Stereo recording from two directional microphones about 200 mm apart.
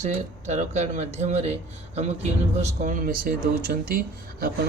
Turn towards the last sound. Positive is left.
turn(degrees=-50)  # may be behind; listen again after turning